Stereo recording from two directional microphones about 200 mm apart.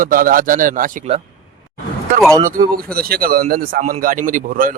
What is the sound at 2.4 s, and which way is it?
Speech, 40° right (ahead or behind).